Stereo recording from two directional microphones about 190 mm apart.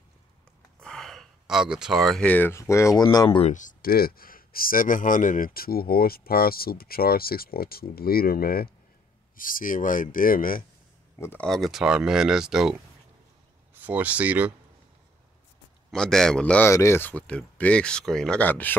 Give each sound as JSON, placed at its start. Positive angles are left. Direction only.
{"t": 0.7, "sound": "speech", "side_deg": 5}
{"t": 3.5, "sound": "speech", "side_deg": 45}
{"t": 11.1, "sound": "speech", "side_deg": 10}
{"t": 13.7, "sound": "speech", "side_deg": -10}
{"t": 15.9, "sound": "speech", "side_deg": 5}